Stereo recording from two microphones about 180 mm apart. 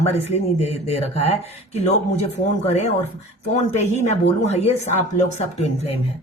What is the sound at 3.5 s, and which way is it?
Speech, 40° left (ahead or behind).